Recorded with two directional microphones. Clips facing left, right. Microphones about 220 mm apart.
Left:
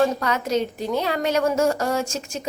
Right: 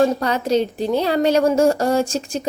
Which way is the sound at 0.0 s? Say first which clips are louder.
Right 4 dB; 30° right (ahead or behind).